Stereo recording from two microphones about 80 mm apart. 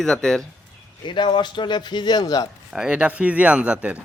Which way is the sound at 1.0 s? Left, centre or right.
Left.